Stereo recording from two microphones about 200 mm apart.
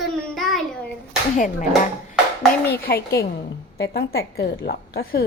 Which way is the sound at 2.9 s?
50° left (ahead or behind).